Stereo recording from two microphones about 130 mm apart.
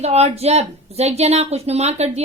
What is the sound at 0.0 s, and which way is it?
Speech, 55° right (ahead or behind).